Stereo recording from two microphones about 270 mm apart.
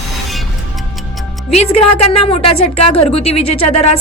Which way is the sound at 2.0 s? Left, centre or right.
Left.